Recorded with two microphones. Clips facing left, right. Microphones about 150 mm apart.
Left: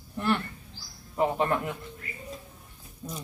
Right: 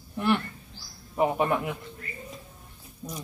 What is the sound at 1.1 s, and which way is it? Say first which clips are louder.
Speech: right 1 dB; 15° right (ahead or behind).